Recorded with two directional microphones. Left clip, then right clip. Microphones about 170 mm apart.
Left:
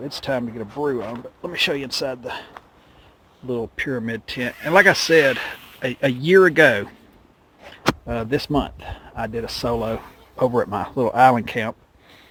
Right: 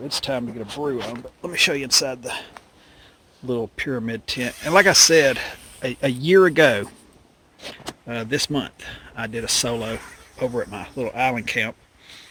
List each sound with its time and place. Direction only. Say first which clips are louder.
0.1 s speech: even; centre (ahead or behind)
1.5 s speech: right 2 dB; 20° right (ahead or behind)
3.4 s speech: right 1 dB; 30° right (ahead or behind)
3.8 s speech: left 1 dB; centre (ahead or behind)
4.1 s speech: even; 10° right (ahead or behind)
8.0 s speech: left 1 dB; centre (ahead or behind)
10.7 s speech: left 7 dB; 20° left (ahead or behind)
11.3 s speech: right 1 dB; 10° left (ahead or behind)